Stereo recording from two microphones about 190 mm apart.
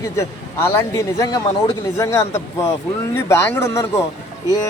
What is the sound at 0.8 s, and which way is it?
Speech, 15° left (ahead or behind).